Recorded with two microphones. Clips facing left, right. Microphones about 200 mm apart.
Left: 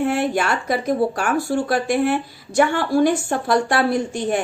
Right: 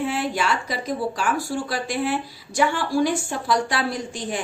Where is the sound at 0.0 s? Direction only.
55° left (ahead or behind).